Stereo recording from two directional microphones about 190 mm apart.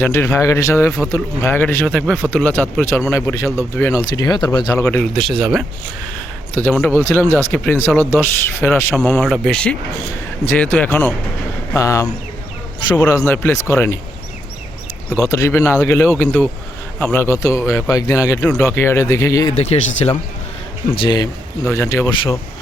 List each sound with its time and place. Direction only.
0.0 s speech: 15° left (ahead or behind)
4.9 s speech: 5° left (ahead or behind)
15.2 s speech: 15° left (ahead or behind)
19.5 s speech: 35° left (ahead or behind); by 22.4 s 20° left (ahead or behind)